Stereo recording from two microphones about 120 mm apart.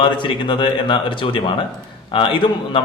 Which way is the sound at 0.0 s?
45° left (ahead or behind).